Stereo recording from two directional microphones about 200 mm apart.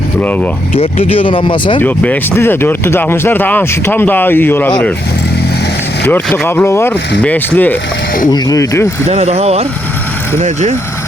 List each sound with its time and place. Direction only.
0.2 s speech: 10° left (ahead or behind)
0.8 s speech: 30° left (ahead or behind)
1.8 s speech: 10° left (ahead or behind)
6.1 s speech: 10° left (ahead or behind)
9.0 s speech: 30° right (ahead or behind)